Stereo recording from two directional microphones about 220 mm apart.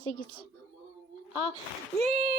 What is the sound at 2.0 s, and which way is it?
Speech, 30° right (ahead or behind).